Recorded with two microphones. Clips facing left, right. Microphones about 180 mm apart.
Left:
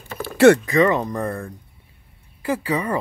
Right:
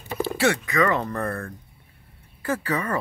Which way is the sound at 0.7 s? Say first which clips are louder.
Left 5 dB; 25° left (ahead or behind).